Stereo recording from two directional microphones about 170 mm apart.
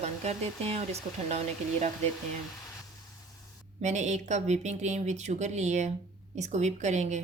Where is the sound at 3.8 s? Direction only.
45° right (ahead or behind).